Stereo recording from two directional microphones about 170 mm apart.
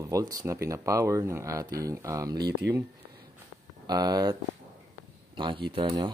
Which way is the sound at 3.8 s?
20° right (ahead or behind).